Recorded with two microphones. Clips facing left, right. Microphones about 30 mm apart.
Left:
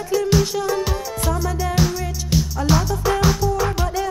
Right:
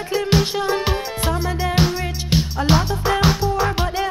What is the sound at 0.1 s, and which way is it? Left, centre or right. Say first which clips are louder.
Music: left 1 dB; right.